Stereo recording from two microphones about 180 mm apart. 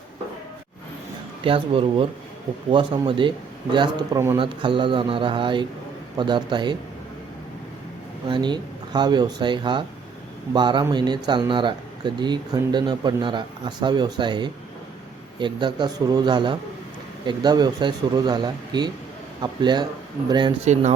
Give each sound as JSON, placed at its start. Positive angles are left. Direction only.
{"t": 1.5, "sound": "speech", "side_deg": -30}
{"t": 8.3, "sound": "speech", "side_deg": -25}